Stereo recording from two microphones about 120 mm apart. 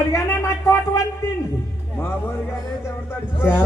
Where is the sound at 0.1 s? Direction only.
25° left (ahead or behind).